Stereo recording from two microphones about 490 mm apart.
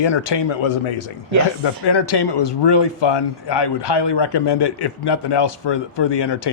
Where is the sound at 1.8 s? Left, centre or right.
Left.